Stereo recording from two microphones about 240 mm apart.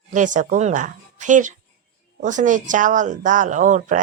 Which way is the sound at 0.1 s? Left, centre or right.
Right.